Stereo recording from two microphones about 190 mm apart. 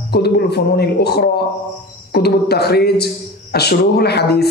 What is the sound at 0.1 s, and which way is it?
A man's voice, 60° left (ahead or behind).